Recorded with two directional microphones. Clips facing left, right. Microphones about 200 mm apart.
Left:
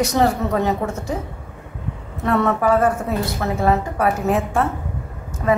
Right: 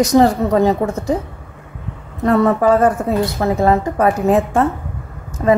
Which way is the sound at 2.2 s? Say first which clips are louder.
Right 5 dB; 35° right (ahead or behind).